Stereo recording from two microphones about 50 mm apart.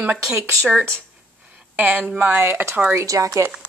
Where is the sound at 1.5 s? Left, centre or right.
Right.